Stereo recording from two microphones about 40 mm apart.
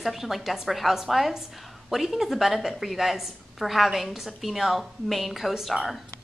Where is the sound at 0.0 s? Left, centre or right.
Centre.